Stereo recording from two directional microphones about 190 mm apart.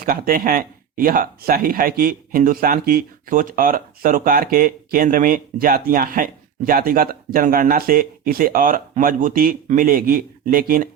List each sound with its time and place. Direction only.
0.0 s speech: 50° right (ahead or behind)